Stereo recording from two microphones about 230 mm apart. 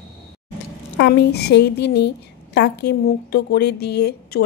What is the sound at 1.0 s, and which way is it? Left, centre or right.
A woman's voice, left.